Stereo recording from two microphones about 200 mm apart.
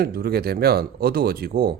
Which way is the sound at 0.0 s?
50° right (ahead or behind).